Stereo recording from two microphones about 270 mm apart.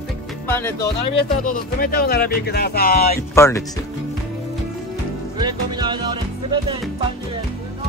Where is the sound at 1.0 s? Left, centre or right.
Left.